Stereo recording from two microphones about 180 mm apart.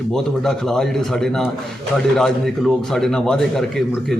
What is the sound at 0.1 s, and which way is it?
A man's voice, centre (ahead or behind).